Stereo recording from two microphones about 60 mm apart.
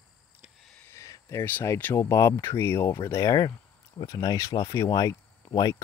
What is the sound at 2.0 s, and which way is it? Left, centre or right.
Speech, left.